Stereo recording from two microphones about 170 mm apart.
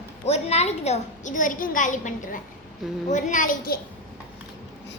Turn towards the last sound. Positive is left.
turn(degrees=55)  # may be behind; listen again after turning